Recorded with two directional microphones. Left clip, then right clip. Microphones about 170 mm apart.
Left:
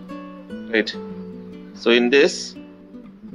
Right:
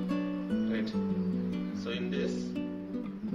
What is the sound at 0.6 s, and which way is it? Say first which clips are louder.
Music: left 14 dB; 40° right (ahead or behind).